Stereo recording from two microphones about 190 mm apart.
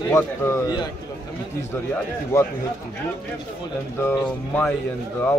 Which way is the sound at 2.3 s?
15° left (ahead or behind).